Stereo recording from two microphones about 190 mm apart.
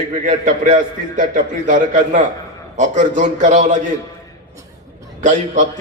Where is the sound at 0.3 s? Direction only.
40° right (ahead or behind).